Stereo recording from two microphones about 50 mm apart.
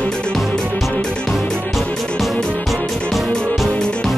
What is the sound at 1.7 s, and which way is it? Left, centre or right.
Music, centre.